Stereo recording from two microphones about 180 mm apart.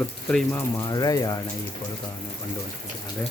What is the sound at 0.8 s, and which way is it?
Speech, 20° left (ahead or behind).